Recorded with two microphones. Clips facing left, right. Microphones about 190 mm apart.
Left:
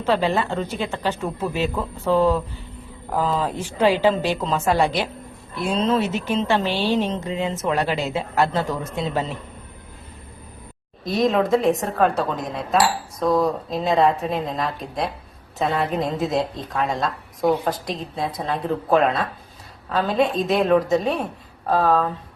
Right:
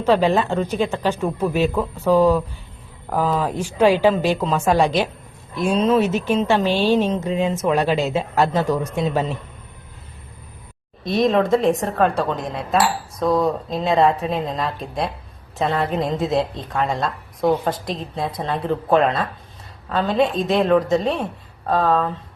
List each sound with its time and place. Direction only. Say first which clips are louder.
0.0 s a woman's voice: right 4 dB; 15° right (ahead or behind)
11.0 s a woman's voice: right 2 dB; centre (ahead or behind)